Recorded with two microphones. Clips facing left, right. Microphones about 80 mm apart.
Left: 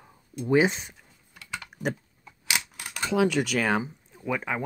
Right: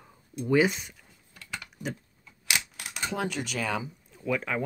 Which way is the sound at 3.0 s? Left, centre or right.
Left.